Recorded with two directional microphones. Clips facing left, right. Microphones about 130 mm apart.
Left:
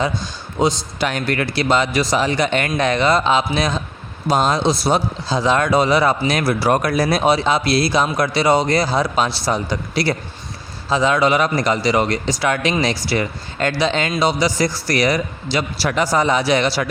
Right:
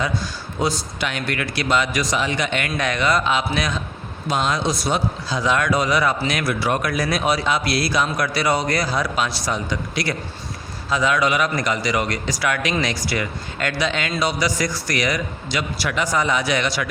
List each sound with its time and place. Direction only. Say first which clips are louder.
0.6 s speech: left 5 dB; 20° left (ahead or behind)
0.9 s speech: left 5 dB; 40° left (ahead or behind)